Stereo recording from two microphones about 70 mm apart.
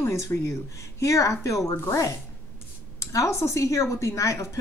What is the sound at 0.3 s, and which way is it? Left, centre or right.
Speech, left.